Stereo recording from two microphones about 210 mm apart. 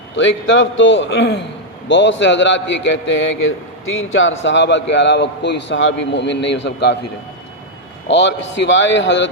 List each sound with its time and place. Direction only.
0.2 s a man's voice: 60° left (ahead or behind)
8.0 s a man's voice: 55° left (ahead or behind)